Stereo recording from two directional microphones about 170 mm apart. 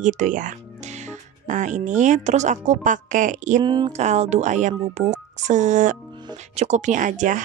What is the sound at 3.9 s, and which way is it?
A woman's voice, 40° right (ahead or behind).